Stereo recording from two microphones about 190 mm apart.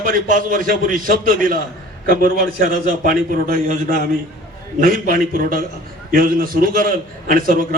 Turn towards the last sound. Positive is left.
turn(degrees=-45)  # may be behind; listen again after turning